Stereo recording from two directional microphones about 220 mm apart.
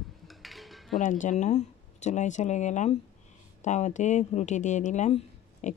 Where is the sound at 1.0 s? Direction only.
35° left (ahead or behind).